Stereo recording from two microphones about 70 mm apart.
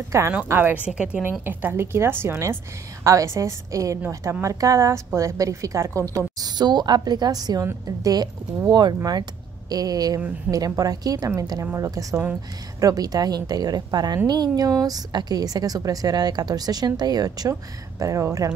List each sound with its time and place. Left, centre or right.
0.1 s a woman's voice: right
0.5 s a woman's voice: right
0.8 s a woman's voice: centre
1.4 s a woman's voice: right
6.4 s a woman's voice: right
8.6 s a woman's voice: right
11.6 s a woman's voice: right
11.9 s a woman's voice: right